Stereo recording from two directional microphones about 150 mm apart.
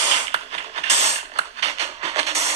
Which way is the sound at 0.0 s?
45° right (ahead or behind).